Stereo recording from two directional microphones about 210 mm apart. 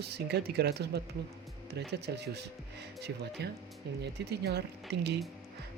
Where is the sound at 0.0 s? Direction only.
50° right (ahead or behind).